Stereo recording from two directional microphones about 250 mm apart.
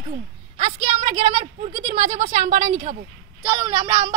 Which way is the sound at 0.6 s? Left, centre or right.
Right.